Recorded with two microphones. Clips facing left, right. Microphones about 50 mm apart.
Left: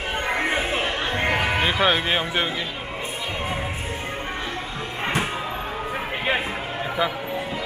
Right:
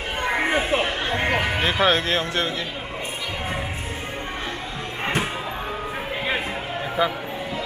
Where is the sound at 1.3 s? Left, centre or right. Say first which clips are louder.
Even; centre.